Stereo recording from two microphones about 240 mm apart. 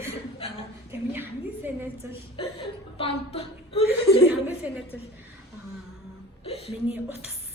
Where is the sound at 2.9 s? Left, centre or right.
Left.